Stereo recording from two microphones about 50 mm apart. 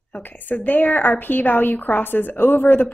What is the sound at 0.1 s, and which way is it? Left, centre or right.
A woman's voice, left.